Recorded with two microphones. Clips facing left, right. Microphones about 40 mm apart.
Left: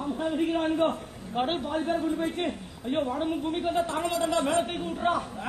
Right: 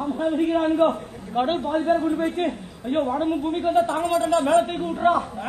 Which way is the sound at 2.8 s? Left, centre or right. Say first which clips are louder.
Right 5 dB; centre.